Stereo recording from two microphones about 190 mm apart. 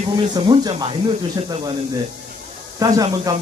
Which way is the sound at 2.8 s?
20° right (ahead or behind).